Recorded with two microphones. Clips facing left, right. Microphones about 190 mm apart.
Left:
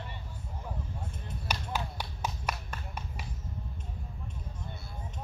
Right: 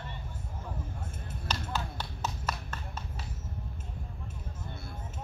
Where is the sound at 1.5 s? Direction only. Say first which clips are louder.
Even; 10° left (ahead or behind).